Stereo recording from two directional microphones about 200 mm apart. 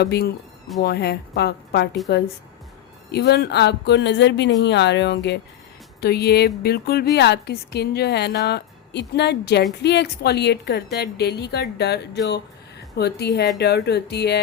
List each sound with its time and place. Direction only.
0.0 s a woman's voice: 55° left (ahead or behind)
3.1 s a woman's voice: 55° left (ahead or behind)